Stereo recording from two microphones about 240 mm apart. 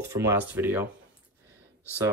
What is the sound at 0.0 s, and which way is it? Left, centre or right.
Speech, centre.